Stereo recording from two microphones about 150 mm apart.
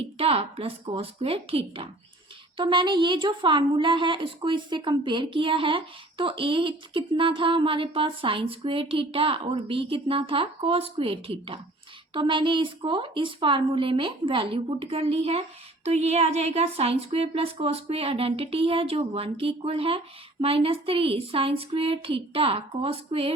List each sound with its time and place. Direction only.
0.0 s a woman's voice: 40° right (ahead or behind)